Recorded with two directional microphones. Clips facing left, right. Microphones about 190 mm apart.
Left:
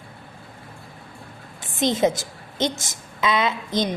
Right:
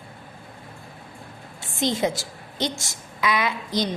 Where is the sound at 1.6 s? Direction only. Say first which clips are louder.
Left 3 dB; 20° left (ahead or behind).